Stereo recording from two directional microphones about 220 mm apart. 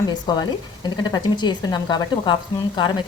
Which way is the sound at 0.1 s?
20° left (ahead or behind).